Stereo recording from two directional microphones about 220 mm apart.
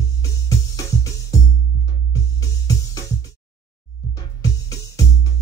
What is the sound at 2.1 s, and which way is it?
Music, 15° left (ahead or behind).